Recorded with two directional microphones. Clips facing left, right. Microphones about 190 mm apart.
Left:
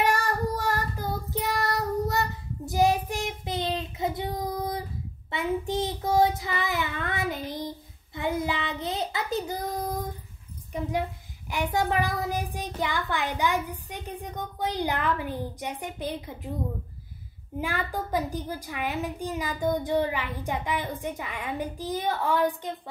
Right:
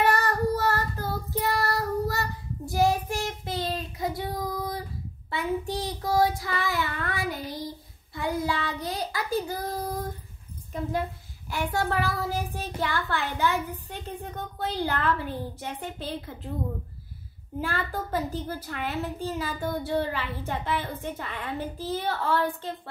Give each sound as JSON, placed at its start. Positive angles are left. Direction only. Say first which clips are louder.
{"t": 0.0, "sound": "child singing", "louder": "right 2 dB", "side_deg": 10}
{"t": 8.1, "sound": "a child's voice", "louder": "even", "side_deg": 20}
{"t": 10.7, "sound": "a woman's voice", "louder": "even", "side_deg": 15}
{"t": 17.6, "sound": "a child's voice", "louder": "even", "side_deg": 15}